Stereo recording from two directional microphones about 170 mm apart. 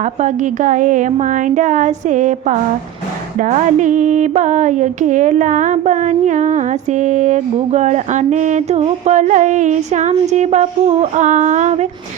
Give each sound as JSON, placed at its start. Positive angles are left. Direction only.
{"t": 0.0, "sound": "speech", "side_deg": -45}